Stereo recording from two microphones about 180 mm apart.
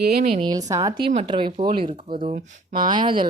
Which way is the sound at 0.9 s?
50° right (ahead or behind).